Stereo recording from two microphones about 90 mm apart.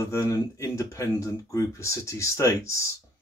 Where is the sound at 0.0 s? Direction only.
35° left (ahead or behind).